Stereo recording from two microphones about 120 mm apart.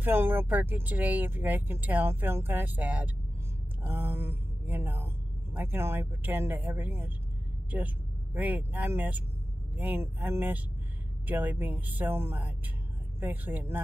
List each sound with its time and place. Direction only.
0.0 s speech: 15° right (ahead or behind)